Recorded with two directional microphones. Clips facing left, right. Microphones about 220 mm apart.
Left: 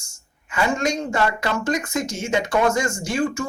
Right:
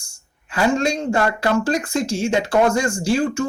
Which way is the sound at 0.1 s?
30° right (ahead or behind).